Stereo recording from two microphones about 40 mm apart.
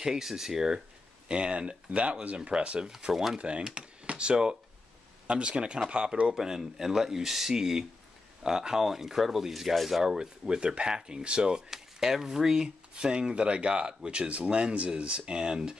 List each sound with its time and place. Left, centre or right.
0.0 s speech: centre
1.3 s speech: right
3.1 s speech: centre
3.3 s speech: right
6.3 s speech: centre
10.0 s speech: centre
11.7 s speech: centre